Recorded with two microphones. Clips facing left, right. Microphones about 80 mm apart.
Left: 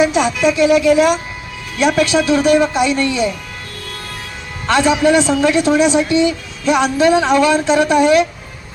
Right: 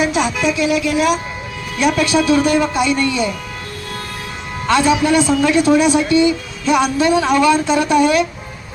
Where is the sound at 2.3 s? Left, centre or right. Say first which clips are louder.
Left 2 dB; centre.